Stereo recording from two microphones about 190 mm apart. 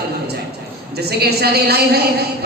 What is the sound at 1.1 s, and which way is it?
Speech, 55° right (ahead or behind).